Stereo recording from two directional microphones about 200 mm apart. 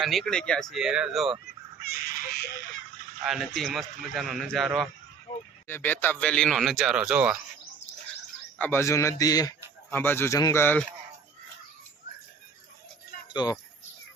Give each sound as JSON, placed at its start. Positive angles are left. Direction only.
{"t": 0.0, "sound": "speech", "side_deg": 0}
{"t": 1.8, "sound": "bird", "side_deg": 50}
{"t": 3.2, "sound": "speech", "side_deg": 0}
{"t": 8.5, "sound": "speech", "side_deg": 10}
{"t": 13.3, "sound": "speech", "side_deg": 20}